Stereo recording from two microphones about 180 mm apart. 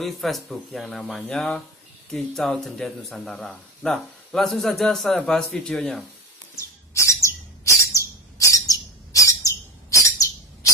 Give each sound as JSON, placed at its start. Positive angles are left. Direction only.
{"t": 0.0, "sound": "speech", "side_deg": 0}
{"t": 6.5, "sound": "chirp", "side_deg": 15}